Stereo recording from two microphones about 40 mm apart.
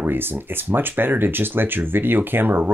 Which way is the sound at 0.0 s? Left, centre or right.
Right.